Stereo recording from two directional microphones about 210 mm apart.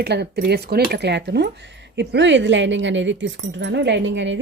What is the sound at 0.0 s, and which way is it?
Speech, 50° right (ahead or behind).